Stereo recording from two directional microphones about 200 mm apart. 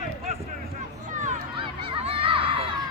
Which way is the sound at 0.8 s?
35° right (ahead or behind).